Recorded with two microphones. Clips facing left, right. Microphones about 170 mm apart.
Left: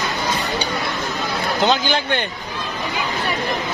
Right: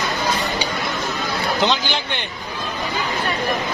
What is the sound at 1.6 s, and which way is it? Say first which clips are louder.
Speech: left 3 dB; 50° left (ahead or behind).